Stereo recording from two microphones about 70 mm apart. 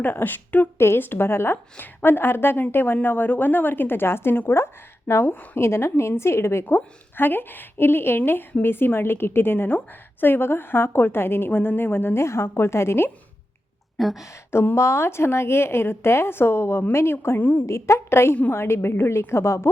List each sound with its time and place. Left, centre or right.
0.0 s a woman's voice: left
6.7 s a woman's voice: left
14.0 s speech: centre
14.5 s a woman's voice: left